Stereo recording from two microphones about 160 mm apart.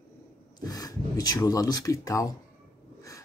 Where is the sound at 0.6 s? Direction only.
25° left (ahead or behind).